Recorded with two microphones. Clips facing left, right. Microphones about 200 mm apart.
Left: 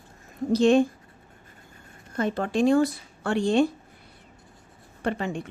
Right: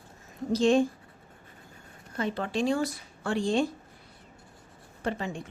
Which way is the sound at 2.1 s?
45° left (ahead or behind).